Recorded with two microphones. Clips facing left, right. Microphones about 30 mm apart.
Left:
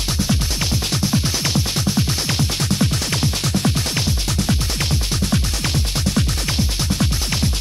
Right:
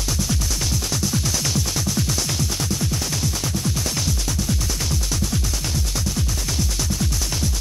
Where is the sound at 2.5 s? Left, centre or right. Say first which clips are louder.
Left 4 dB; left.